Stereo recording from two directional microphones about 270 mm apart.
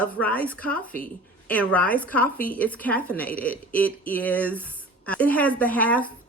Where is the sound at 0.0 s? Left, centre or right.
Centre.